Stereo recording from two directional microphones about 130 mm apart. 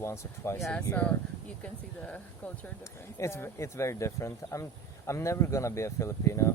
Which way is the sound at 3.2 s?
20° left (ahead or behind).